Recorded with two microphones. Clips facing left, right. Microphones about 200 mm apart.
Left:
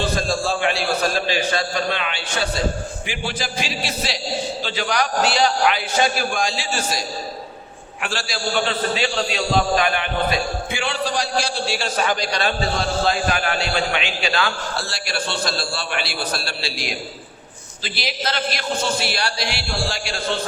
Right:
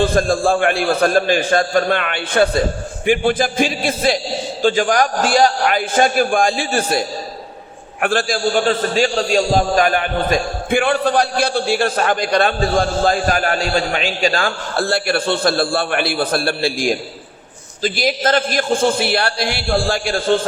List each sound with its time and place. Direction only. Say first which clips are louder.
0.0 s a man's voice: right 7 dB; 55° right (ahead or behind)
8.0 s a man's voice: right 9 dB; 50° right (ahead or behind)